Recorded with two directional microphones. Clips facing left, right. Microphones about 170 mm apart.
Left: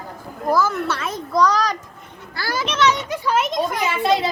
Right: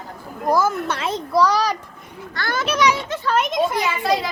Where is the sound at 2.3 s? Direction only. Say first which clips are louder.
Even; 5° left (ahead or behind).